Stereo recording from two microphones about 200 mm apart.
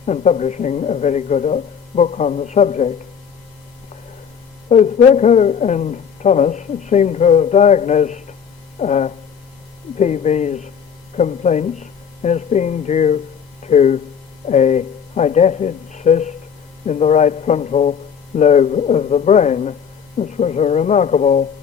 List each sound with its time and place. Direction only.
0.0 s speech: 35° left (ahead or behind)
4.7 s speech: 35° left (ahead or behind)